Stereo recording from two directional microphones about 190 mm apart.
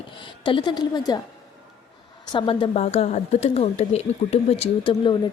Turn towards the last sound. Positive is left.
turn(degrees=30)  # may be behind; listen again after turning